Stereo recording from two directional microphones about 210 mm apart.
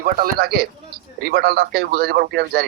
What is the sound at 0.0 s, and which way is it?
Speech, 45° right (ahead or behind).